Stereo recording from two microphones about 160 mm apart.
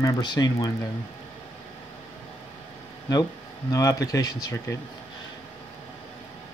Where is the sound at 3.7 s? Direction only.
20° left (ahead or behind).